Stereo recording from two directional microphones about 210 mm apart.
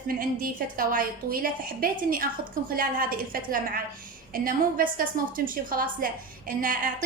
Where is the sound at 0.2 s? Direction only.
40° right (ahead or behind).